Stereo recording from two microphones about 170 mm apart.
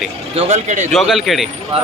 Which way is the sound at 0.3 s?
45° right (ahead or behind).